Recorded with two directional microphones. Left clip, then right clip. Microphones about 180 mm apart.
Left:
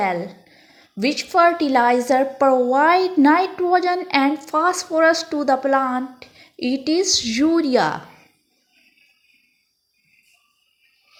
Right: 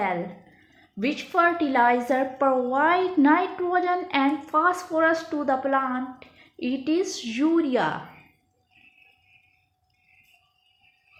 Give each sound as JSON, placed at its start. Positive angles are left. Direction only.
{"t": 0.9, "sound": "a woman's voice", "side_deg": 35}